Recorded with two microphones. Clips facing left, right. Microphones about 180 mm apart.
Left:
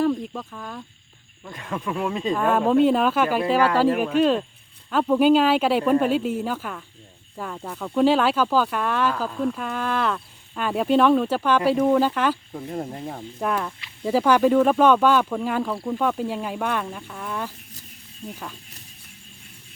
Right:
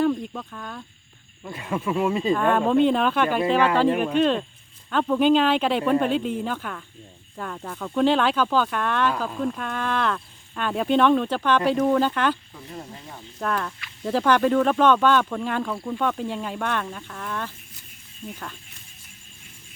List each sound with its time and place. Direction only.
0.0 s speech: 5° left (ahead or behind)
1.5 s speech: 10° right (ahead or behind)
12.5 s speech: 50° left (ahead or behind)
13.4 s speech: 10° left (ahead or behind)